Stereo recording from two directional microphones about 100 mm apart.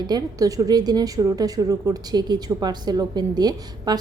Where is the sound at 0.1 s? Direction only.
35° right (ahead or behind).